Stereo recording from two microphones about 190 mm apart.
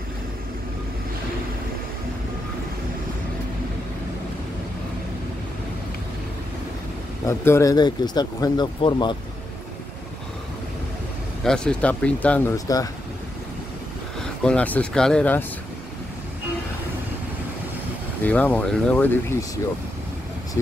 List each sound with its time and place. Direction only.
7.2 s speech: 15° left (ahead or behind)
11.4 s speech: 5° left (ahead or behind)
14.4 s speech: 5° left (ahead or behind)
18.2 s speech: 10° left (ahead or behind)